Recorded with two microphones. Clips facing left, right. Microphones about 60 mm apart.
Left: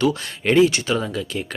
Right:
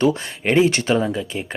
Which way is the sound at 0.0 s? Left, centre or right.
Right.